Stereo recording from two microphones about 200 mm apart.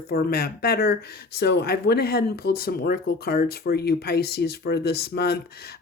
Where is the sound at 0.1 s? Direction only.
50° left (ahead or behind).